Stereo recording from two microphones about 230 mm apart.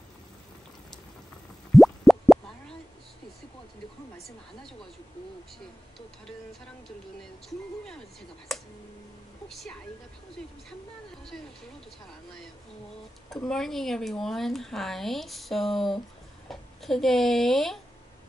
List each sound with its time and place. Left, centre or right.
1.8 s plop: centre
7.4 s speech: centre
9.5 s speech: centre
13.5 s speech: centre